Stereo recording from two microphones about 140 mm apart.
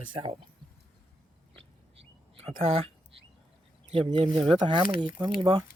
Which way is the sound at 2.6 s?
45° right (ahead or behind).